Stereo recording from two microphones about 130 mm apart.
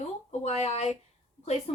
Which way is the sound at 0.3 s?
50° left (ahead or behind).